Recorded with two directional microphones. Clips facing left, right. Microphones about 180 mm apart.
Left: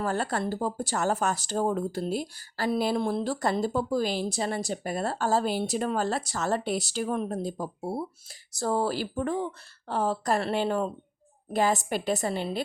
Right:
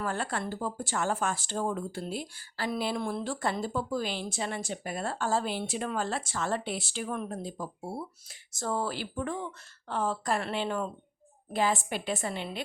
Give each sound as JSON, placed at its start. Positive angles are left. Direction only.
{"t": 0.0, "sound": "speech", "side_deg": 40}